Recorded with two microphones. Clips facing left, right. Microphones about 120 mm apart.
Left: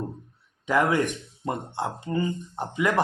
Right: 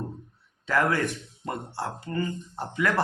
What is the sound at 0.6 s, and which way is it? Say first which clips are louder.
A man's voice: left 2 dB; 15° left (ahead or behind).